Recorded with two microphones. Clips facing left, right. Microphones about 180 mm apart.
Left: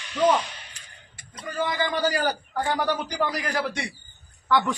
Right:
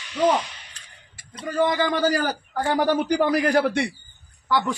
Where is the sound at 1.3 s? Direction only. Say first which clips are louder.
Right 6 dB; 35° right (ahead or behind); by 3.8 s 50° right (ahead or behind).